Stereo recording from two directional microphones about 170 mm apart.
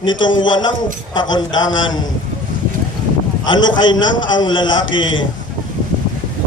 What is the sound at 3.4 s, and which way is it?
A man's voice, 25° left (ahead or behind).